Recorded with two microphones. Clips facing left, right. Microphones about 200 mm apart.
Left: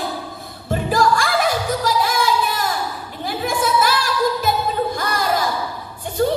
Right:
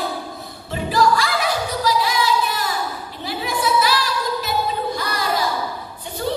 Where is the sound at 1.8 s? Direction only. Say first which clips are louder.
Right 3 dB; 50° left (ahead or behind).